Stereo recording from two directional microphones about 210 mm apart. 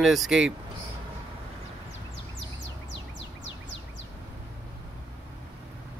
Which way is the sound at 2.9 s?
60° left (ahead or behind).